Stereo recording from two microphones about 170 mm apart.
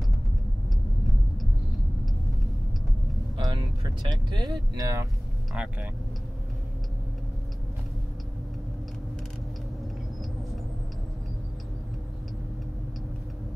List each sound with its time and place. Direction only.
3.3 s vehicle: 25° right (ahead or behind)
4.1 s speech: 25° right (ahead or behind)
5.5 s speech: 5° right (ahead or behind)